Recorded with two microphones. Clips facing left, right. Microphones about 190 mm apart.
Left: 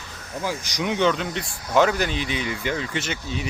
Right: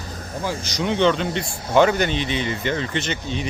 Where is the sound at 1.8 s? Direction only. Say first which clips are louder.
Right 3 dB; centre (ahead or behind).